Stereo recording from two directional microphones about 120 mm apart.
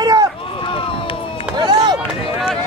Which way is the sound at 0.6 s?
45° left (ahead or behind).